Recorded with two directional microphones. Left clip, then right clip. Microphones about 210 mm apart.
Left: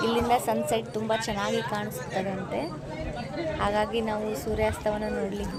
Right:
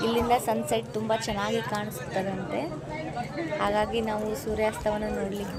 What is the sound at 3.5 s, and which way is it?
A woman's voice, centre (ahead or behind).